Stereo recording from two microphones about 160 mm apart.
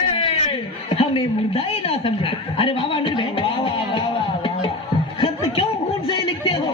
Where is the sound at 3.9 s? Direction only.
30° left (ahead or behind).